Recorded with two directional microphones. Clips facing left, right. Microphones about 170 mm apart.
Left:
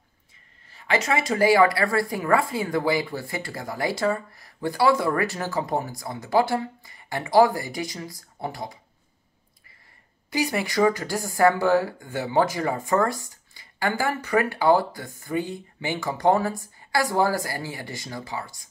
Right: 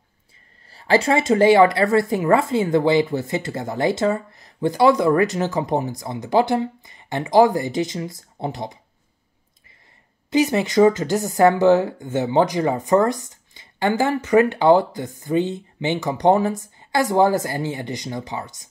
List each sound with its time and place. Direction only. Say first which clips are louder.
0.7 s speech: right 6 dB; 35° right (ahead or behind)
10.3 s speech: right 7 dB; 20° right (ahead or behind)